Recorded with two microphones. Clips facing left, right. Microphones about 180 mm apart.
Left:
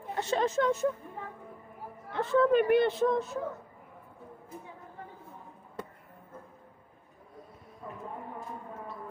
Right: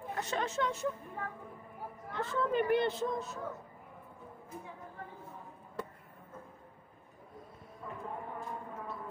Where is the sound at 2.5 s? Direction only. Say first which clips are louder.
Left 6 dB; 65° left (ahead or behind).